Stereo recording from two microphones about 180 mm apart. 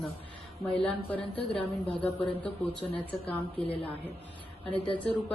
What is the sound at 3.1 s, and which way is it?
Speech, 10° left (ahead or behind).